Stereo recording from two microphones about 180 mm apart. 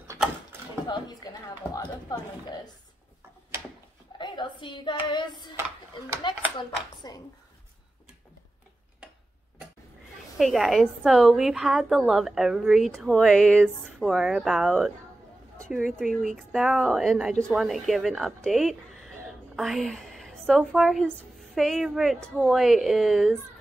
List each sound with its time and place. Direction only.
0.8 s speech: 25° left (ahead or behind)
4.2 s speech: 25° left (ahead or behind)
7.0 s speech: 20° left (ahead or behind)
10.3 s a woman's voice: centre (ahead or behind)